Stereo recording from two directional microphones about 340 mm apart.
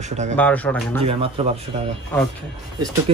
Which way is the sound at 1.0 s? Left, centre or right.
Centre.